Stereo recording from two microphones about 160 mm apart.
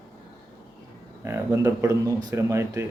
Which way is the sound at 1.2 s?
15° right (ahead or behind).